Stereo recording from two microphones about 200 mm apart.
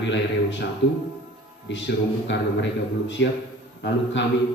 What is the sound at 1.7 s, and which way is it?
Speech, 65° left (ahead or behind).